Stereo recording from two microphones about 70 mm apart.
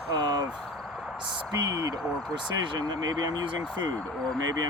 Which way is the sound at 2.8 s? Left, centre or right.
Right.